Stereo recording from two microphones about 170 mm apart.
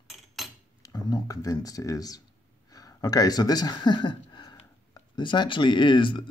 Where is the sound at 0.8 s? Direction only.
20° left (ahead or behind).